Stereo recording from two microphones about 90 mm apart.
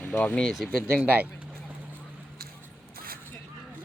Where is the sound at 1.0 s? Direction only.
20° right (ahead or behind).